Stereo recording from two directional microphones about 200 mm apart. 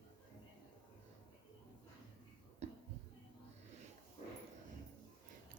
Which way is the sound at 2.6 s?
35° right (ahead or behind).